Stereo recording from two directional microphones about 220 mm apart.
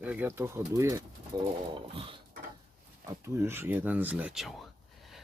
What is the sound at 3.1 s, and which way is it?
Speech, 10° right (ahead or behind).